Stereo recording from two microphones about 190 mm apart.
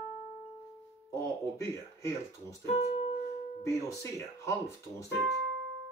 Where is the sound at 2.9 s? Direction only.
30° left (ahead or behind).